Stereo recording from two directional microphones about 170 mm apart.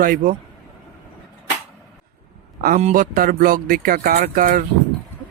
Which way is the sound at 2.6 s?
50° right (ahead or behind).